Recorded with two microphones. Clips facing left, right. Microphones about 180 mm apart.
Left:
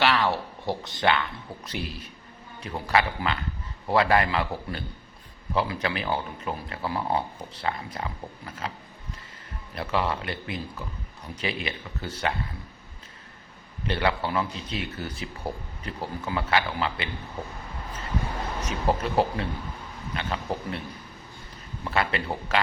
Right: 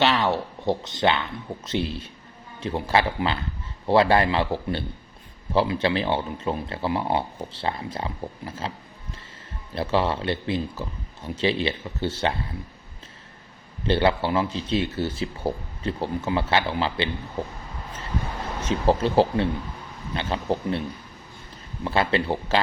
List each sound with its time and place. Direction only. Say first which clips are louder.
0.0 s speech: right 2 dB; 25° right (ahead or behind)
9.7 s speech: right 4 dB; 30° right (ahead or behind)
13.8 s speech: right 5 dB; 30° right (ahead or behind)
18.6 s speech: right 6 dB; 30° right (ahead or behind)
21.8 s speech: right 5 dB; 25° right (ahead or behind)